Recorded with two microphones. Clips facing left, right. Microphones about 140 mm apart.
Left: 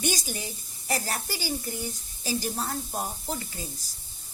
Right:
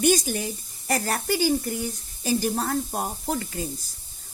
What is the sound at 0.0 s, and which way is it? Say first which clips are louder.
A man's voice: right 9 dB; 50° right (ahead or behind).